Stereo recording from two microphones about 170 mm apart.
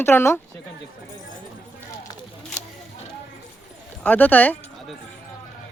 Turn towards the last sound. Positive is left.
turn(degrees=10)  # may be behind; listen again after turning